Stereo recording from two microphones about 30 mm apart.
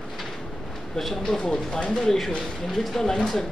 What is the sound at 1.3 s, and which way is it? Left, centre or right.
Speech, left.